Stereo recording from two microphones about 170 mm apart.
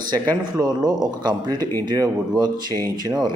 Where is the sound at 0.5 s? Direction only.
25° right (ahead or behind).